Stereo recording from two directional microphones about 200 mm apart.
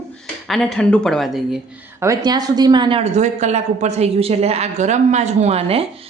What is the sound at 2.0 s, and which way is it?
Speech, 20° right (ahead or behind).